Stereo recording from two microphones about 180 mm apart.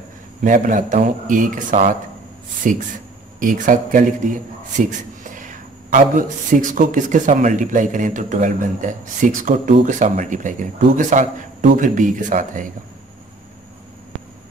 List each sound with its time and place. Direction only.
0.4 s a man's voice: 45° right (ahead or behind)